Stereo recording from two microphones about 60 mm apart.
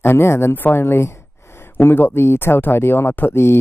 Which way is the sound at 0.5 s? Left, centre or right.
Left.